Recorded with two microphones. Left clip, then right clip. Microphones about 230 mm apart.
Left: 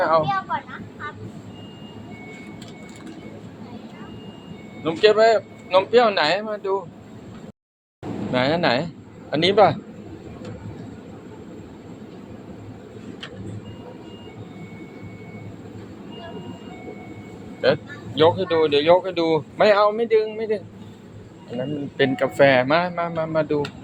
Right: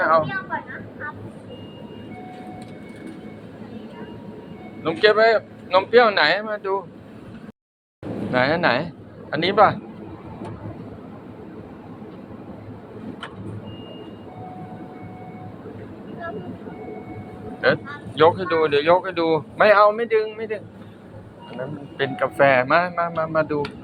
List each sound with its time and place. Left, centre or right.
0.0 s speech: left
4.8 s a man's voice: centre
8.3 s speech: centre
9.3 s a man's voice: left
17.6 s speech: left
21.9 s speech: left